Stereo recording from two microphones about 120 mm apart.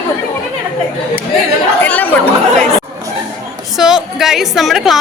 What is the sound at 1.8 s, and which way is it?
Chatter, 15° left (ahead or behind).